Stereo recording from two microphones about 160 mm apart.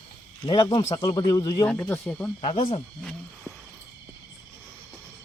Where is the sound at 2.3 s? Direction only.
35° left (ahead or behind).